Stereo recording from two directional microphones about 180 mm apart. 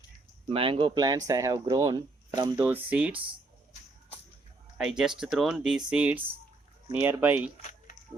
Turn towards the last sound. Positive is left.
turn(degrees=40)  # may be behind; listen again after turning